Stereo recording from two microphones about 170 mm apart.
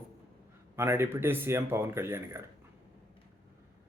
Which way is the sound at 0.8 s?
15° right (ahead or behind).